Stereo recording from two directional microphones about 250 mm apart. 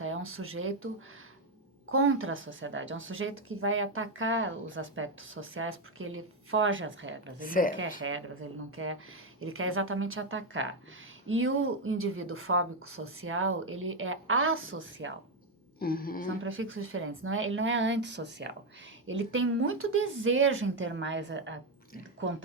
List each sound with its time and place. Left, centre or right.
0.0 s speech: right
1.9 s speech: right
7.4 s a woman's voice: left
8.0 s speech: right
15.8 s a woman's voice: left
16.2 s speech: right